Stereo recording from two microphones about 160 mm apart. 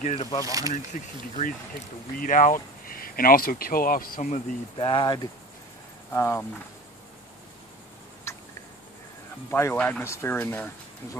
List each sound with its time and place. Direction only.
0.0 s speech: 40° left (ahead or behind)
0.5 s speech: 20° right (ahead or behind)
0.9 s speech: 55° left (ahead or behind)
4.7 s speech: 30° left (ahead or behind)
9.5 s speech: 15° left (ahead or behind)